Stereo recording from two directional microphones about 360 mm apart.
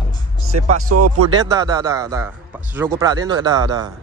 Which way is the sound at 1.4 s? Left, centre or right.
Centre.